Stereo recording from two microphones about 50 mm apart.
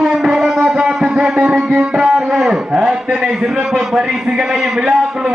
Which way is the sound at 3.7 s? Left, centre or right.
Centre.